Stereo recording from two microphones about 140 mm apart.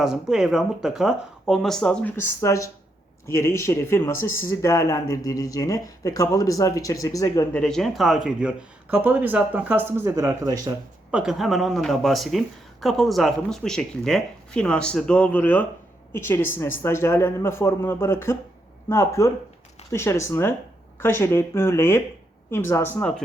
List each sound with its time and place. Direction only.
0.0 s speech: 5° right (ahead or behind)
2.1 s speech: 20° left (ahead or behind)
7.5 s speech: 5° left (ahead or behind); by 10.8 s 25° right (ahead or behind)
11.1 s a man's voice: 5° right (ahead or behind)